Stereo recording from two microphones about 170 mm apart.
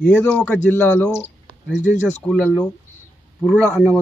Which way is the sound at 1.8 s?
45° left (ahead or behind).